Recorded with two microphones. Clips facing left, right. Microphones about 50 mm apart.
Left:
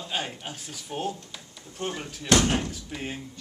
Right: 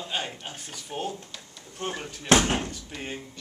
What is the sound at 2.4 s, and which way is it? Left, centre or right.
Speech, centre.